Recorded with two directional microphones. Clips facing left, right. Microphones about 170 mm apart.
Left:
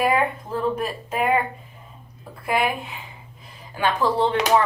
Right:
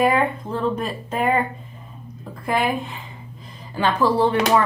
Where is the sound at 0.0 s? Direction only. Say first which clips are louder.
Right 2 dB; 5° left (ahead or behind).